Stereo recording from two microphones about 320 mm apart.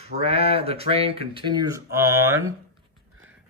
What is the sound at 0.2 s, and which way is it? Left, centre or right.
Speech, centre.